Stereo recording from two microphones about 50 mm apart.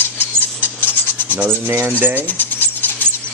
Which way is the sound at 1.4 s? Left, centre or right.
Right.